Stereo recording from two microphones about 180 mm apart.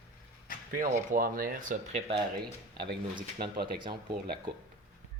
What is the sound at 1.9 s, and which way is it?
Speech, 35° right (ahead or behind).